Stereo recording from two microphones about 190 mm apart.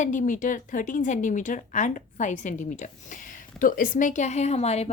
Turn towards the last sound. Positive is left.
turn(degrees=35)  # may be behind; listen again after turning